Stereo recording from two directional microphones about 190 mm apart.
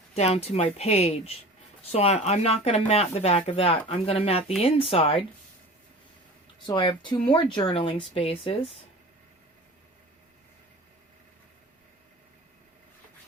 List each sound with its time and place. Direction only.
0.1 s speech: 35° left (ahead or behind)
6.7 s a woman's voice: 25° left (ahead or behind)